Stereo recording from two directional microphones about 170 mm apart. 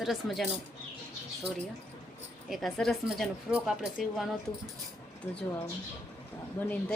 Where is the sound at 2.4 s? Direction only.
Centre (ahead or behind).